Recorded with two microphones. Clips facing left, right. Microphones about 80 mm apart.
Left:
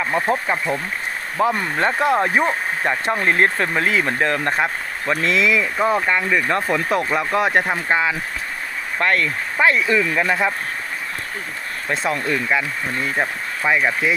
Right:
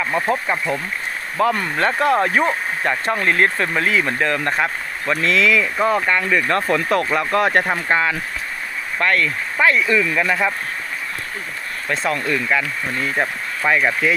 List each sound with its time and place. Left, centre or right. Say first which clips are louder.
0.0 s speech: even; left
5.7 s speech: right 1 dB; centre
9.0 s speech: right 1 dB; left
11.9 s speech: right 1 dB; left
12.5 s speech: even; centre
12.9 s speech: right 1 dB; left
13.7 s speech: right 1 dB; centre